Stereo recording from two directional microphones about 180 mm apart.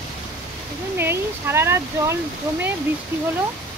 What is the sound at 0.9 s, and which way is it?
Speech, 15° right (ahead or behind).